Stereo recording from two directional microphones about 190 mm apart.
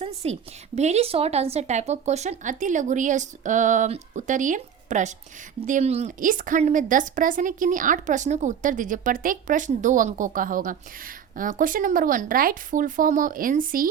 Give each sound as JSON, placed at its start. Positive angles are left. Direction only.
{"t": 0.0, "sound": "a woman's voice", "side_deg": -35}